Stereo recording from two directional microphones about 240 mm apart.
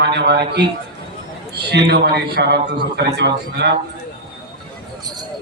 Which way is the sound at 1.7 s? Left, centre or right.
Right.